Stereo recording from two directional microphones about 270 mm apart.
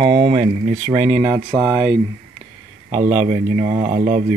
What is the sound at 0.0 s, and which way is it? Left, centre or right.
Speech, right.